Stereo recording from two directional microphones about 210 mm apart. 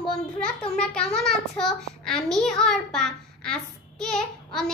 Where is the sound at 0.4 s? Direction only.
5° left (ahead or behind).